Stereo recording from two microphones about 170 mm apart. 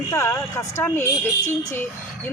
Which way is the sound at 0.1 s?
15° left (ahead or behind).